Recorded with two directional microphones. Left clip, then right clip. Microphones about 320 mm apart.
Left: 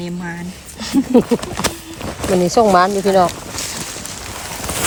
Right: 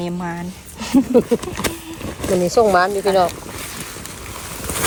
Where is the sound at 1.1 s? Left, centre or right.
Left.